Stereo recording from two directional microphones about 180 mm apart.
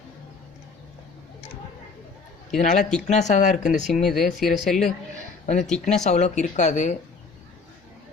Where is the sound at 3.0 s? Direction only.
40° left (ahead or behind).